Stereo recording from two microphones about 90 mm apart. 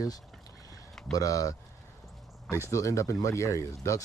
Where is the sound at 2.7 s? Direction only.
35° left (ahead or behind).